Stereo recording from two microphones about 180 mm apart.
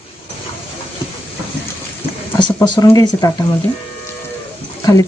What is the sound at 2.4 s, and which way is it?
Speech, 20° left (ahead or behind).